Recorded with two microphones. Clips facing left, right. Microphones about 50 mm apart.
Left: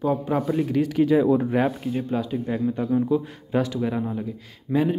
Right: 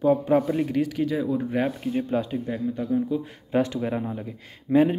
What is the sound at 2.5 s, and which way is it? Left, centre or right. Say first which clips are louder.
Speech: left 3 dB; left.